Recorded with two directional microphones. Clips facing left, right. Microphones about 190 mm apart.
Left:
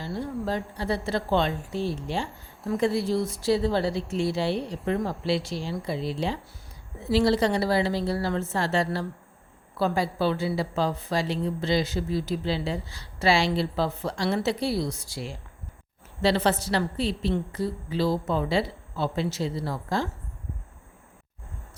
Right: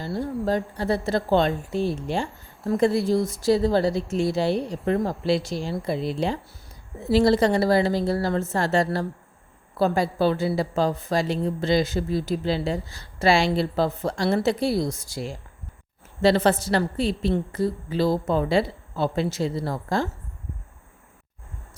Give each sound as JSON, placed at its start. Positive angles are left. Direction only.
{"t": 0.0, "sound": "a woman's voice", "side_deg": -40}